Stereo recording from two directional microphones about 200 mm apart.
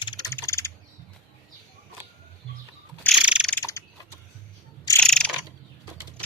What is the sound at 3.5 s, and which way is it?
Mechanisms, 15° left (ahead or behind).